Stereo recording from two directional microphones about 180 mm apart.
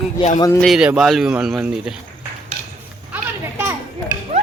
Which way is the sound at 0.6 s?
Centre (ahead or behind).